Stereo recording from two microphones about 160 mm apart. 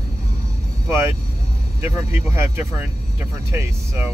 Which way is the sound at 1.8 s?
15° right (ahead or behind).